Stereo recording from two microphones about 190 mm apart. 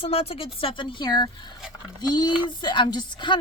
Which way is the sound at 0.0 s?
30° left (ahead or behind).